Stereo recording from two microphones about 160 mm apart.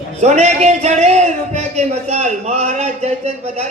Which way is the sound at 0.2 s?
45° right (ahead or behind).